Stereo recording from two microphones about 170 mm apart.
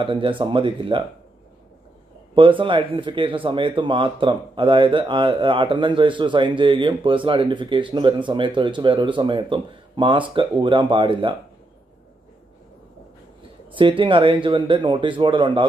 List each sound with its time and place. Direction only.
0.0 s speech: 30° right (ahead or behind)
2.3 s speech: 30° right (ahead or behind)
13.7 s speech: 30° right (ahead or behind)